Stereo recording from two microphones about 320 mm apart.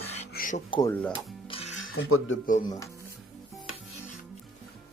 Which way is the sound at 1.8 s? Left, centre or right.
Left.